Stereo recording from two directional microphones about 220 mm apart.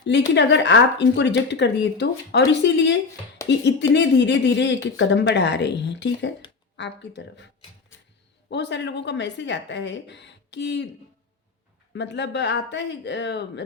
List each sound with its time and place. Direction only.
0.3 s speech: 55° left (ahead or behind)
11.9 s speech: 50° left (ahead or behind)